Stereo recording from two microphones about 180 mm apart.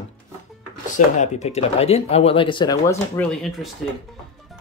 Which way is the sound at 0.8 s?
45° left (ahead or behind).